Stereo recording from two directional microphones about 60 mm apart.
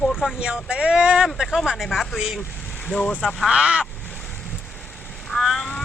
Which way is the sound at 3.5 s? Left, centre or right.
Centre.